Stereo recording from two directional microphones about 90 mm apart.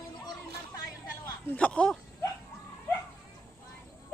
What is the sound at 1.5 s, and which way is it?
Speech, 10° left (ahead or behind).